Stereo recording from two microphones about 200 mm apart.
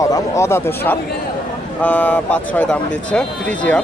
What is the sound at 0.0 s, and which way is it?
A man's voice, 15° left (ahead or behind).